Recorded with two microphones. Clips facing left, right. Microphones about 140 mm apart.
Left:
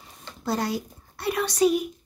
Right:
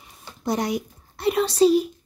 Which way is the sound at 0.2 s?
20° right (ahead or behind).